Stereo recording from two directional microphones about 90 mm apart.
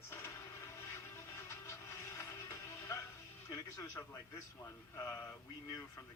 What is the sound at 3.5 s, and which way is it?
Speech, 35° left (ahead or behind).